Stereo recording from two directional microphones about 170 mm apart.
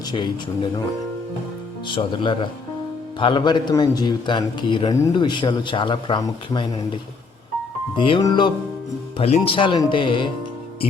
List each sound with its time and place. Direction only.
2.0 s a man's voice: 30° left (ahead or behind)
9.1 s a man's voice: 35° left (ahead or behind)